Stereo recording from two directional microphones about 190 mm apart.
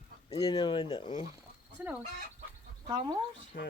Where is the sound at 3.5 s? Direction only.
50° left (ahead or behind).